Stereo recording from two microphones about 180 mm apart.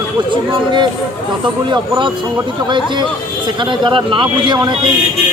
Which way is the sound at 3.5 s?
25° right (ahead or behind).